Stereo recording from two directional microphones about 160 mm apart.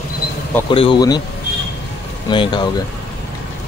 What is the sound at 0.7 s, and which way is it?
Speech, 30° left (ahead or behind).